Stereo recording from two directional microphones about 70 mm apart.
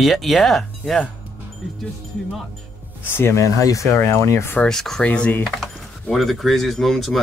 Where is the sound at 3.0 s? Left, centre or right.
Left.